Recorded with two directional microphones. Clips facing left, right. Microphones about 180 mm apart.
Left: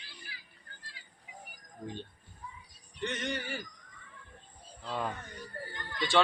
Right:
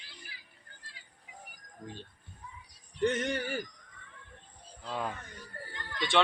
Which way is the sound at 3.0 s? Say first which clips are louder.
Right 6 dB; 45° right (ahead or behind).